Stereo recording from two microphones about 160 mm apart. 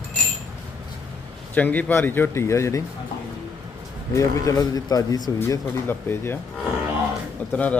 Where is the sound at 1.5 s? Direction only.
10° left (ahead or behind).